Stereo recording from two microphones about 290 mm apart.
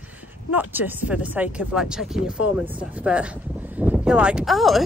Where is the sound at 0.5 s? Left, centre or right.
Centre.